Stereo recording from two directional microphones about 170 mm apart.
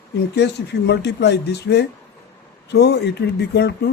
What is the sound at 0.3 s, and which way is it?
Speech, 90° left.